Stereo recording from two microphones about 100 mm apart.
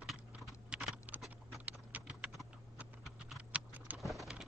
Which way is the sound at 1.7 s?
15° right (ahead or behind).